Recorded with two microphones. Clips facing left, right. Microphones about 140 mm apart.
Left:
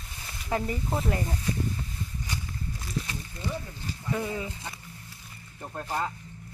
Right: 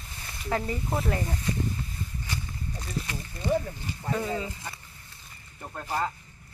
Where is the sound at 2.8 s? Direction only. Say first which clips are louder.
Even; centre (ahead or behind).